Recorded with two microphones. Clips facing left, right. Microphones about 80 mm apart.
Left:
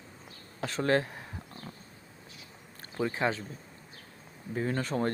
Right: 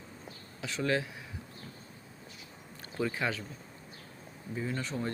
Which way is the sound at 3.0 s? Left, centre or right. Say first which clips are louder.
Left 3 dB; left.